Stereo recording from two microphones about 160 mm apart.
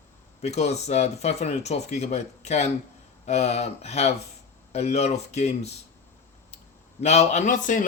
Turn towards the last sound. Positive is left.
turn(degrees=55)  # may be behind; listen again after turning